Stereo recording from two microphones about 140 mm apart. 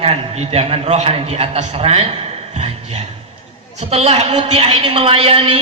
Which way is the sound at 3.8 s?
50° right (ahead or behind).